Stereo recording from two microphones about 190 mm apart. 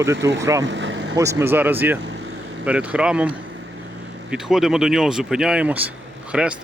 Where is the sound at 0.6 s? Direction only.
75° right (ahead or behind).